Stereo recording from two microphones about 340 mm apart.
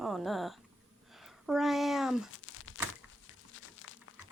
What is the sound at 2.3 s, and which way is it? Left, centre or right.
Crumpling, left.